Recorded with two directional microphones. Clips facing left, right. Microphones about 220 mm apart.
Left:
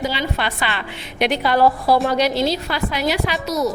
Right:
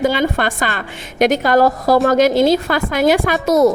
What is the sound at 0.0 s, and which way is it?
A woman's voice, 50° right (ahead or behind).